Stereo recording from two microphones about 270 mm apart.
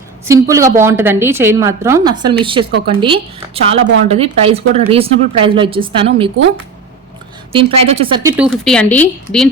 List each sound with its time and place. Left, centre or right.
0.3 s a woman's voice: centre
7.5 s speech: right
8.2 s a woman's voice: centre
8.6 s a woman's voice: centre